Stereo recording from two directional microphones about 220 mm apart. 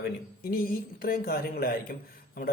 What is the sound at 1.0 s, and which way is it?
Speech, 45° left (ahead or behind).